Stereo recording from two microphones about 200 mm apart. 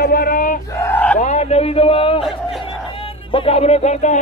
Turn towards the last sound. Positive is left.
turn(degrees=35)  # may be behind; listen again after turning